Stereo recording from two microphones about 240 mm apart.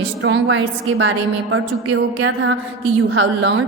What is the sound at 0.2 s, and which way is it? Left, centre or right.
A woman's voice, right.